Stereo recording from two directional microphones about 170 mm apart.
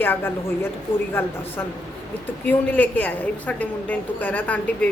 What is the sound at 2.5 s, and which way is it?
A woman's voice, 10° left (ahead or behind).